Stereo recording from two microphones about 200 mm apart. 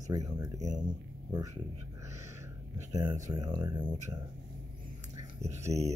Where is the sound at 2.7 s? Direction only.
20° right (ahead or behind).